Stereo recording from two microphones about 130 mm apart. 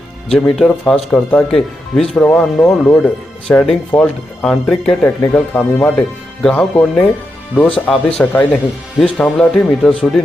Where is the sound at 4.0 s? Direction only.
Centre (ahead or behind).